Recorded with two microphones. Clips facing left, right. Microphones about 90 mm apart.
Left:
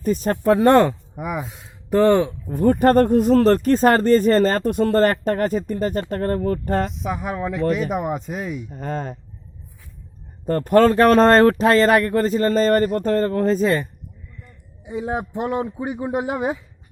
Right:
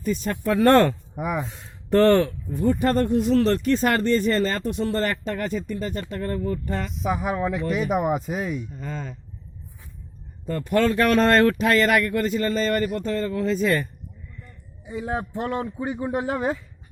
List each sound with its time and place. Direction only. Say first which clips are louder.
0.0 s speech: left 6 dB; 40° left (ahead or behind)
0.6 s speech: left 1 dB; 20° left (ahead or behind)
1.1 s speech: even; centre (ahead or behind)
2.5 s speech: left 8 dB; 50° left (ahead or behind)
6.9 s speech: right 1 dB; centre (ahead or behind)
8.7 s speech: left 6 dB; 55° left (ahead or behind)
10.4 s speech: left 7 dB; 50° left (ahead or behind)
14.8 s a man's voice: left 3 dB; 20° left (ahead or behind)